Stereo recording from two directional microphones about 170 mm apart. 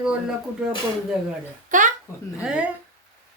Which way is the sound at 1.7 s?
50° right (ahead or behind).